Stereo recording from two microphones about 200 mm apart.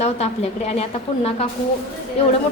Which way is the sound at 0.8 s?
30° left (ahead or behind).